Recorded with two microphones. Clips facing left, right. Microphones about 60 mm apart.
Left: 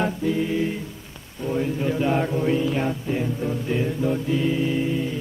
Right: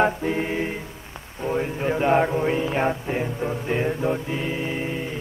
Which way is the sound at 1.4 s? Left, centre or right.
Right.